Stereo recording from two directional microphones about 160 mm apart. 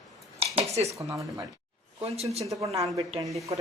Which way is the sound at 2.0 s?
40° right (ahead or behind).